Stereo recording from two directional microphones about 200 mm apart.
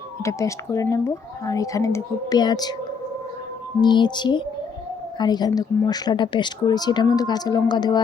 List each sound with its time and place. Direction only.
0.3 s speech: 15° left (ahead or behind)
3.8 s speech: 20° left (ahead or behind)